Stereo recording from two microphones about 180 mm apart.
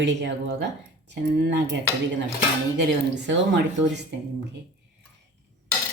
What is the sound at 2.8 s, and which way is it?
Speech, 75° right (ahead or behind).